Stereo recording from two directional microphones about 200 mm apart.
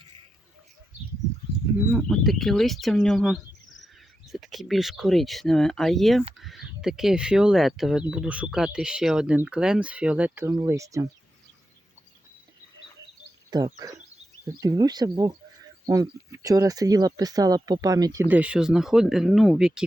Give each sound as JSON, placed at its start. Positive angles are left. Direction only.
{"t": 1.9, "sound": "speech", "side_deg": 0}
{"t": 13.5, "sound": "speech", "side_deg": -20}
{"t": 18.3, "sound": "speech", "side_deg": -5}